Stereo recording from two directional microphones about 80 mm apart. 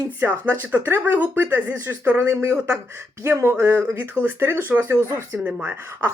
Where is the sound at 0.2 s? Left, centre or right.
Right.